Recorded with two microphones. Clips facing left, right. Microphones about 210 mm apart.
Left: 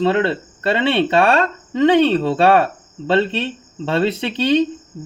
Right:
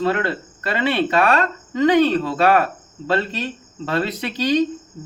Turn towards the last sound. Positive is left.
turn(degrees=25)  # may be behind; listen again after turning